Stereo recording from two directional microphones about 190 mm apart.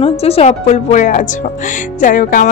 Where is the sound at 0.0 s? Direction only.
30° left (ahead or behind).